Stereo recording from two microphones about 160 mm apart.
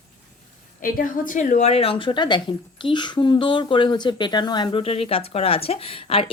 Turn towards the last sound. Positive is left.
turn(degrees=35)  # may be behind; listen again after turning